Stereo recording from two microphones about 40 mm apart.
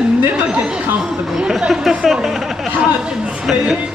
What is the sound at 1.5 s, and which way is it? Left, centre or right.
Speech, centre.